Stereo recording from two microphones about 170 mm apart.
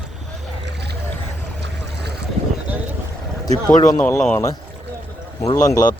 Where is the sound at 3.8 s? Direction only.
15° left (ahead or behind).